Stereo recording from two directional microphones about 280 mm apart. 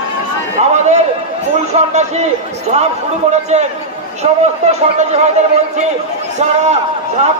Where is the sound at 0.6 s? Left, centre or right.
Right.